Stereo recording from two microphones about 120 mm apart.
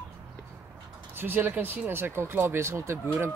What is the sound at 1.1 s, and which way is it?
Speech, 15° right (ahead or behind).